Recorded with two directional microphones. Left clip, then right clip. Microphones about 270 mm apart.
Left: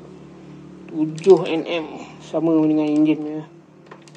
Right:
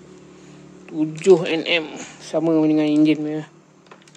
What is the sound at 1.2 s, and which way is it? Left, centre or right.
A man's voice, right.